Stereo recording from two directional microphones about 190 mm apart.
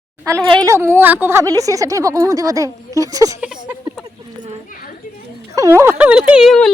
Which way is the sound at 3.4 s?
5° right (ahead or behind).